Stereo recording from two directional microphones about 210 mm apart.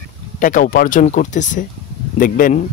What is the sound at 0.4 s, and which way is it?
Speech, 40° left (ahead or behind).